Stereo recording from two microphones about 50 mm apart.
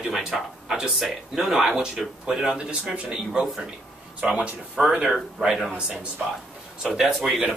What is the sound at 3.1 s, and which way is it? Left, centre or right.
Speech, centre.